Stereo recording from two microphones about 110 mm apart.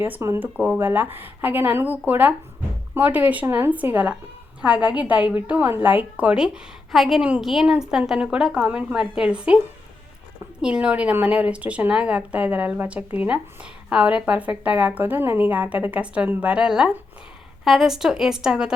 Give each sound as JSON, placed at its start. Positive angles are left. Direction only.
{"t": 0.0, "sound": "a woman's voice", "side_deg": -25}
{"t": 10.6, "sound": "a woman's voice", "side_deg": -10}